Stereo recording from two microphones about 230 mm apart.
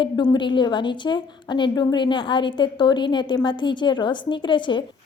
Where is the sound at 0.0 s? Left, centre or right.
Centre.